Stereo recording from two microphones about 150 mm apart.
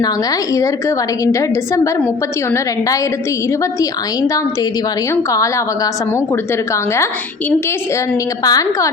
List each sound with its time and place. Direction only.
0.5 s a woman's voice: 20° left (ahead or behind)
3.6 s a woman's voice: 20° left (ahead or behind)
5.3 s a woman's voice: 20° left (ahead or behind)
8.4 s a woman's voice: 25° left (ahead or behind)